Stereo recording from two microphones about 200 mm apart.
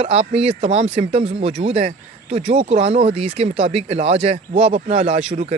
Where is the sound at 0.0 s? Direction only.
30° right (ahead or behind).